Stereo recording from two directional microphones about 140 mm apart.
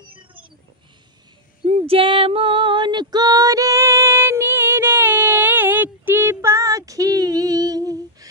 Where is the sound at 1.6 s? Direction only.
45° right (ahead or behind).